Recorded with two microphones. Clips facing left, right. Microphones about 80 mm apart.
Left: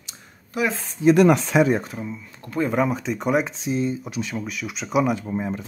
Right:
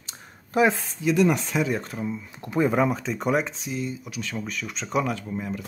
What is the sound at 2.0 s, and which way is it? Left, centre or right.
Speech, centre.